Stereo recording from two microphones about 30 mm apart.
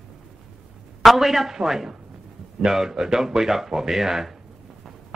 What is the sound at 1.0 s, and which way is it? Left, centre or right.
A man's voice, centre.